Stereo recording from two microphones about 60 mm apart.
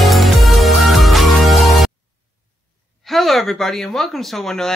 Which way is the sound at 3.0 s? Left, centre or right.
Centre.